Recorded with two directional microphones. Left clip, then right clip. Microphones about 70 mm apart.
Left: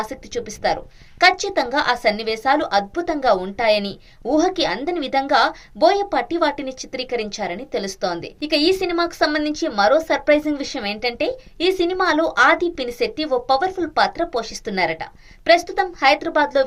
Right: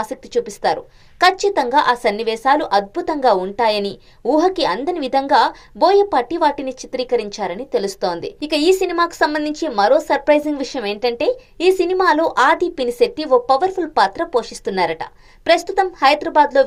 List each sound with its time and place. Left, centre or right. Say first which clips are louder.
0.1 s a woman's voice: right 7 dB; right